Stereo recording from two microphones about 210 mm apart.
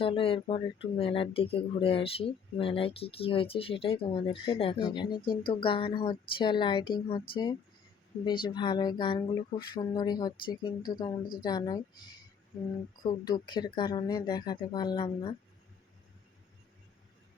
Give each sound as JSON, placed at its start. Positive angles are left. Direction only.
{"t": 0.0, "sound": "speech", "side_deg": 25}
{"t": 13.0, "sound": "speech", "side_deg": 20}